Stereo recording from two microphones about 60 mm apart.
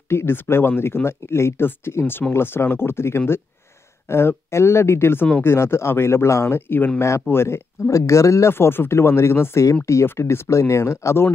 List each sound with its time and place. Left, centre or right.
0.1 s speech: left
7.0 s speech: left
7.2 s speech: left
8.5 s speech: left